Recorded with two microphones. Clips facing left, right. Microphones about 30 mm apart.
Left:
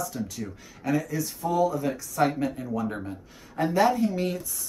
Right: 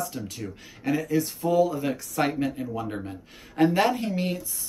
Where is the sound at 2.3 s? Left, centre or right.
Right.